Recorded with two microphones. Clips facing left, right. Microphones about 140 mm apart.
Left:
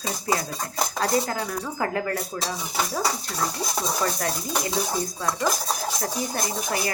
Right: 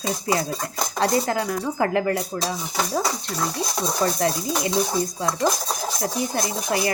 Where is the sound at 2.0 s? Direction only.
25° right (ahead or behind).